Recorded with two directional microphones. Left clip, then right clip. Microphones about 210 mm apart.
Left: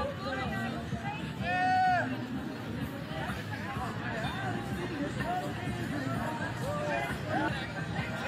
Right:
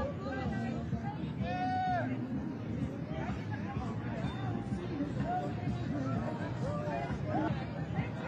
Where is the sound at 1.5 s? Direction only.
35° right (ahead or behind).